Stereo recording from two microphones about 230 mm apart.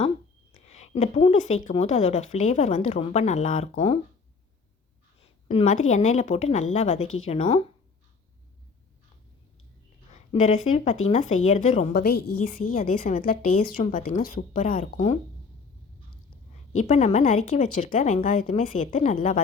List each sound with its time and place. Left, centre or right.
0.5 s a woman's voice: left
5.5 s a woman's voice: left
10.1 s a woman's voice: left
16.7 s speech: left